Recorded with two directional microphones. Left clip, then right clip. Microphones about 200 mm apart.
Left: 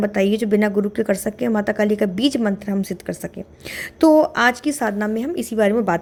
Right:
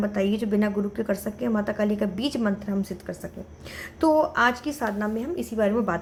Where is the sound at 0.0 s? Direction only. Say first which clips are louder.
Left 7 dB; 35° left (ahead or behind).